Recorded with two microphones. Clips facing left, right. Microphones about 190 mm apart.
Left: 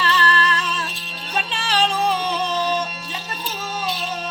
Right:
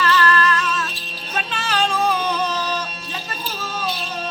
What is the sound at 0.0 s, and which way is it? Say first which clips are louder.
Music: right 3 dB; 30° left (ahead or behind).